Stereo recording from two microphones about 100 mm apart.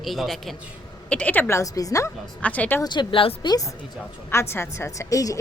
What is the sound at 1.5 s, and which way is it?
Speech, 35° left (ahead or behind).